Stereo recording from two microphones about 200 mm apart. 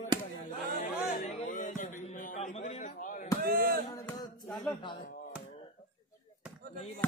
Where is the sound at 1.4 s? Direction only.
40° left (ahead or behind).